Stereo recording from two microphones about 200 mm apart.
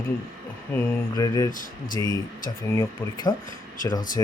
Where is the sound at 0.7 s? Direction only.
10° left (ahead or behind).